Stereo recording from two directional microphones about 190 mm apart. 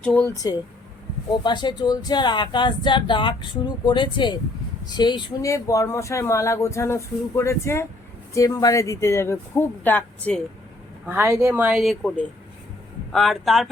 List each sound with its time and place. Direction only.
0.0 s speech: 5° left (ahead or behind)
1.5 s speech: 20° left (ahead or behind)
11.0 s speech: 10° right (ahead or behind)